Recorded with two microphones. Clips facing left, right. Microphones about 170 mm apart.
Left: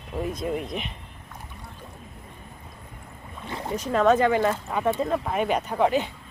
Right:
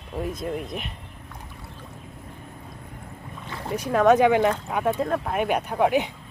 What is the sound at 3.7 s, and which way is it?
Speech, 10° right (ahead or behind).